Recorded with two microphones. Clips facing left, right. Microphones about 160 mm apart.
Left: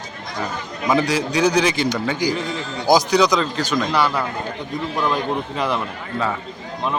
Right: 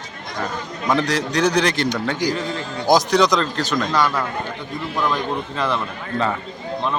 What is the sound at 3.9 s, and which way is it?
Speech, 10° left (ahead or behind).